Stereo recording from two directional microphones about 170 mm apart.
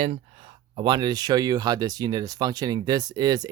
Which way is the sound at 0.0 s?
35° right (ahead or behind).